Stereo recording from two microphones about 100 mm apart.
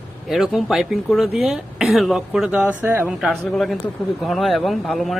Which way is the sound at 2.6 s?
20° right (ahead or behind).